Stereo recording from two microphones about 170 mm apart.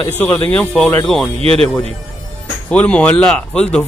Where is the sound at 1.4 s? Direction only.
35° right (ahead or behind).